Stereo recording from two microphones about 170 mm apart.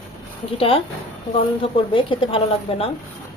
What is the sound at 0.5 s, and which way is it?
Speech, 35° left (ahead or behind).